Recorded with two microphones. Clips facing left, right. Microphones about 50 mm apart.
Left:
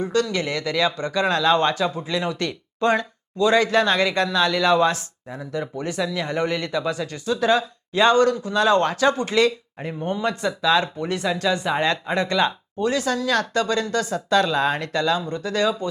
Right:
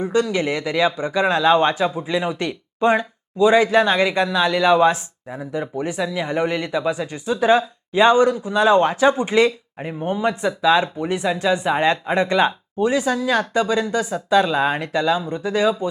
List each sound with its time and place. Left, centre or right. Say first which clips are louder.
0.0 s speech: right 3 dB; centre